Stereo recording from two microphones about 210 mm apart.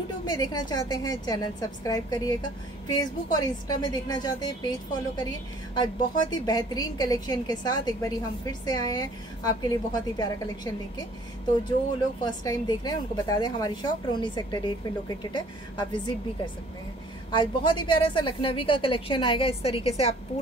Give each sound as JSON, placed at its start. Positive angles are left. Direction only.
{"t": 0.3, "sound": "a woman's voice", "side_deg": 20}
{"t": 12.4, "sound": "a woman's voice", "side_deg": 20}
{"t": 17.3, "sound": "a woman's voice", "side_deg": 20}